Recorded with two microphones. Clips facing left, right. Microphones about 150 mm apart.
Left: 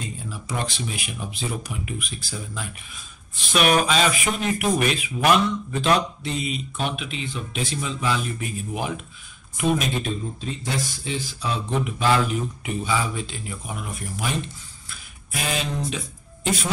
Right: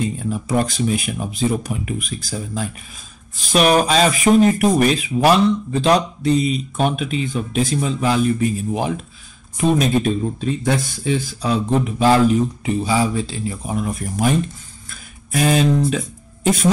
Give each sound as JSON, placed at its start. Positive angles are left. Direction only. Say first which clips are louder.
{"t": 0.3, "sound": "speech", "louder": "right 9 dB", "side_deg": -45}
{"t": 10.6, "sound": "speech", "louder": "right 8 dB", "side_deg": -50}